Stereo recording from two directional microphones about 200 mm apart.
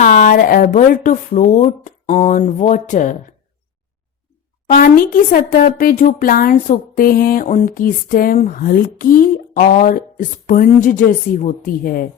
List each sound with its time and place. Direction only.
0.0 s speech: 40° left (ahead or behind)
4.7 s speech: 45° left (ahead or behind)